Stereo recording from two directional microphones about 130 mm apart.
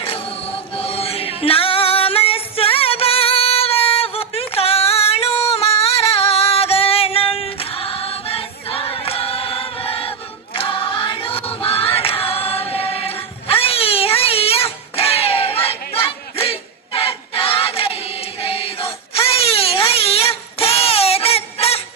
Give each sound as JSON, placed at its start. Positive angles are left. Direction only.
{"t": 0.0, "sound": "music", "side_deg": 45}
{"t": 11.5, "sound": "choir", "side_deg": 45}
{"t": 15.6, "sound": "battle cry", "side_deg": 50}